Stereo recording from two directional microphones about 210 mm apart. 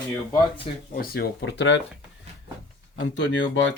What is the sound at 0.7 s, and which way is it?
Speech, 30° left (ahead or behind).